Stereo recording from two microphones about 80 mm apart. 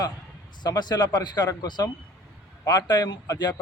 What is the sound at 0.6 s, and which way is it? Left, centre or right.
A man's voice, left.